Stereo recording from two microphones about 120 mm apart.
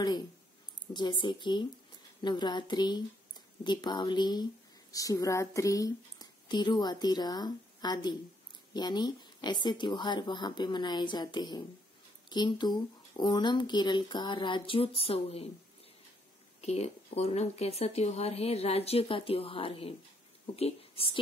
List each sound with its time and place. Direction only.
0.9 s speech: 40° left (ahead or behind); by 15.4 s 55° left (ahead or behind)
16.6 s a woman's voice: 60° left (ahead or behind)